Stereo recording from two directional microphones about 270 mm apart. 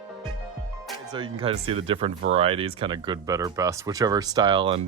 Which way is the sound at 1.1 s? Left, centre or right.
Centre.